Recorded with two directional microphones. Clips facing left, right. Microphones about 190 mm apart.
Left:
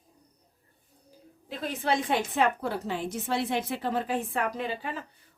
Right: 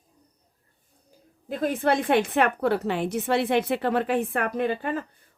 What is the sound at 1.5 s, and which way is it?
A woman's voice, 50° right (ahead or behind).